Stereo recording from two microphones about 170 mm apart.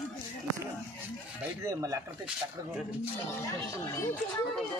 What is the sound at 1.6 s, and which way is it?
Speech, 20° right (ahead or behind).